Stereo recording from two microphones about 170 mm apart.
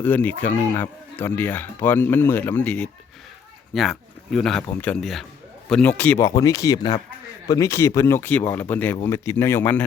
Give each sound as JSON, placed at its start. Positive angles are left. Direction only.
{"t": 0.0, "sound": "speech", "side_deg": 10}